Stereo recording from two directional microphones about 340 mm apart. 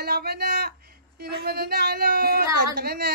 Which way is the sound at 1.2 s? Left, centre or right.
Right.